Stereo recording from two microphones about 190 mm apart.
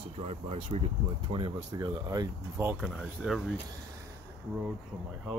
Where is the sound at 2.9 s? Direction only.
Centre (ahead or behind).